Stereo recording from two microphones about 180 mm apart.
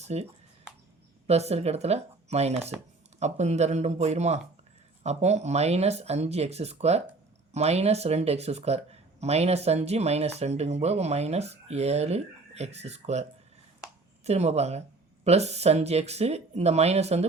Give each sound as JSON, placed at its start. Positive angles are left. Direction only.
{"t": 0.0, "sound": "speech", "side_deg": -35}
{"t": 1.3, "sound": "speech", "side_deg": -35}
{"t": 14.3, "sound": "speech", "side_deg": -35}